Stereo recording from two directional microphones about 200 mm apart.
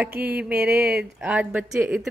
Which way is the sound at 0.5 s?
50° right (ahead or behind).